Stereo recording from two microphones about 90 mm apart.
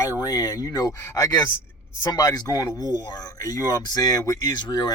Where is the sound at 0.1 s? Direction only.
40° left (ahead or behind).